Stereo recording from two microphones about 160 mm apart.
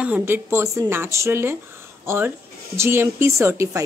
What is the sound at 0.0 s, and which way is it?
Speech, 10° right (ahead or behind).